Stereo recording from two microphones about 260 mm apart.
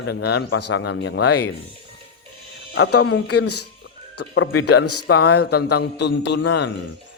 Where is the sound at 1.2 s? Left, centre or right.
Left.